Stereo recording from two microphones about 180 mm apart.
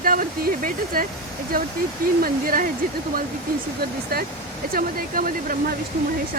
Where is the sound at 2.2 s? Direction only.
50° right (ahead or behind).